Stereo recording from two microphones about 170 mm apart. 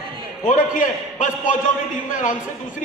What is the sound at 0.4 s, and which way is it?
A man's voice, 50° left (ahead or behind).